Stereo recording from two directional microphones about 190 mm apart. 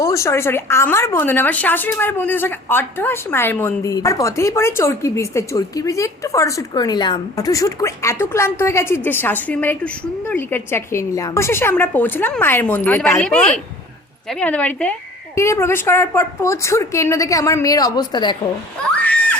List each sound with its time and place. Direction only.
0.0 s a woman's voice: 15° left (ahead or behind)